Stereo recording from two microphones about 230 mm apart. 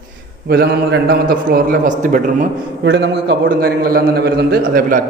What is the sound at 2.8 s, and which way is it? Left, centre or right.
Speech, right.